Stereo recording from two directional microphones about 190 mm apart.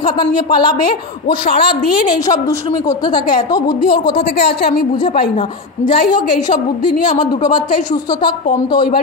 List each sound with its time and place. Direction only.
1.5 s a woman's voice: 50° left (ahead or behind)
2.0 s a woman's voice: 20° left (ahead or behind)
4.4 s a woman's voice: 55° left (ahead or behind)
8.2 s a woman's voice: 25° left (ahead or behind)